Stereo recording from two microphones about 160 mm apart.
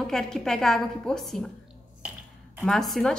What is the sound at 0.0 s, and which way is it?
A woman's voice, 5° left (ahead or behind).